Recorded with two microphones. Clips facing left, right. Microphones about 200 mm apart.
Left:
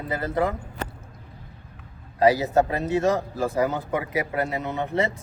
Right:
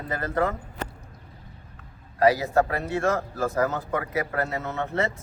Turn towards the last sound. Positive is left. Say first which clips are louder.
# left 2 dB
turn(degrees=15)  # may be behind; listen again after turning